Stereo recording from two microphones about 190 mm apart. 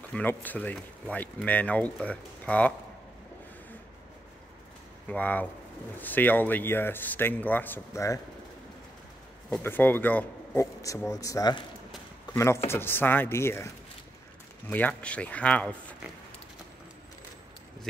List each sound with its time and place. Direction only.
0.1 s speech: 10° left (ahead or behind)
5.0 s speech: 10° left (ahead or behind)
9.5 s speech: 10° left (ahead or behind)
12.3 s a sound: 20° left (ahead or behind)
12.6 s speech: 10° left (ahead or behind)
14.7 s speech: 10° left (ahead or behind)